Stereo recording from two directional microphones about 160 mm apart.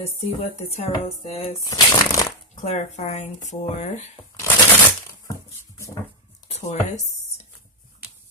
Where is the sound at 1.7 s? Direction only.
20° left (ahead or behind).